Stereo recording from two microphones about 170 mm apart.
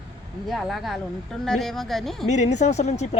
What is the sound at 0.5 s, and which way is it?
A woman's voice, centre (ahead or behind).